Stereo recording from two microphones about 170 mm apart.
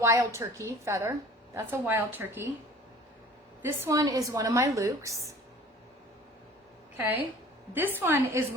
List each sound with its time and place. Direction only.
0.0 s a woman's voice: 15° right (ahead or behind)
3.6 s a woman's voice: 15° right (ahead or behind)
7.7 s a woman's voice: 10° right (ahead or behind)